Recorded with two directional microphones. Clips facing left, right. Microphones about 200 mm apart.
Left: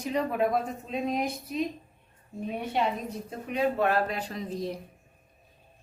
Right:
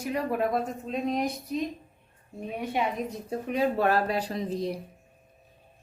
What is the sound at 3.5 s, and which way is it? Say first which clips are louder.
Speech: right 1 dB; 40° right (ahead or behind).